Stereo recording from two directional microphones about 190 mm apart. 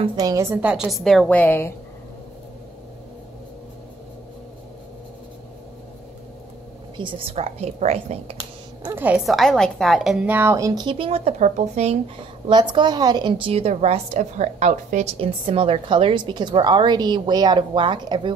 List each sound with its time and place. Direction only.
0.0 s a woman's voice: 20° right (ahead or behind); by 1.7 s 10° left (ahead or behind)
7.0 s a woman's voice: 25° right (ahead or behind)
8.8 s a woman's voice: 10° right (ahead or behind); by 12.0 s 35° right (ahead or behind)
12.7 s a woman's voice: 20° right (ahead or behind)